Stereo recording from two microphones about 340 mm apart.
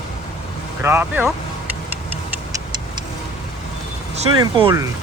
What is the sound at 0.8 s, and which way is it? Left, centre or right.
Speech, centre.